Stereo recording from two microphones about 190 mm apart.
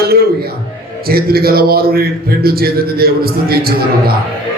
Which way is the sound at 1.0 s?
55° right (ahead or behind).